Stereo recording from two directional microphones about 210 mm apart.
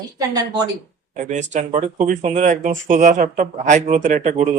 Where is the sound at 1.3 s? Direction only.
35° right (ahead or behind).